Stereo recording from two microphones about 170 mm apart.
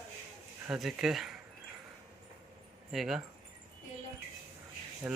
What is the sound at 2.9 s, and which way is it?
Speech, centre (ahead or behind).